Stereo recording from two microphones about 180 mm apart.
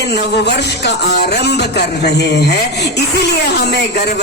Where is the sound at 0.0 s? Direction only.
65° left (ahead or behind).